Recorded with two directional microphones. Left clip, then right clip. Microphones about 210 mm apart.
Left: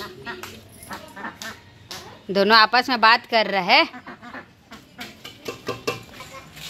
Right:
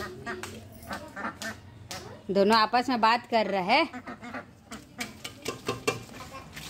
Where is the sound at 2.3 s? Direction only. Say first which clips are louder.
Left 7 dB; 5° left (ahead or behind).